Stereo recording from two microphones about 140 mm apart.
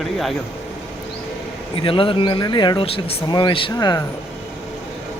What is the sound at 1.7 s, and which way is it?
Speech, 40° left (ahead or behind).